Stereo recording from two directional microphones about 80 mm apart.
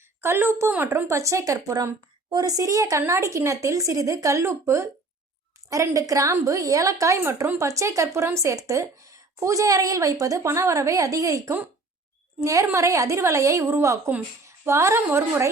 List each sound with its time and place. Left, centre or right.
0.2 s a woman's voice: right
2.3 s a woman's voice: right